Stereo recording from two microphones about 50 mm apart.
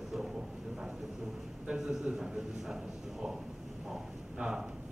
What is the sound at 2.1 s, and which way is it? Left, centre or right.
Speech, centre.